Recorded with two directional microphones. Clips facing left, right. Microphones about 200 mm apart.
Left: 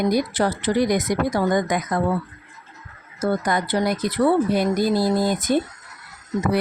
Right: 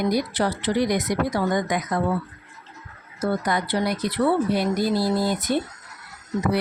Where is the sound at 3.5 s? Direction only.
50° left (ahead or behind).